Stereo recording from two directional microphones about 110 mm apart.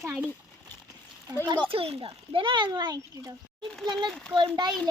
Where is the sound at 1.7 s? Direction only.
60° right (ahead or behind); by 3.3 s 40° right (ahead or behind).